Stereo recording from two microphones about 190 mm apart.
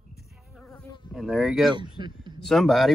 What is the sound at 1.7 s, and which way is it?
Speech, 25° right (ahead or behind).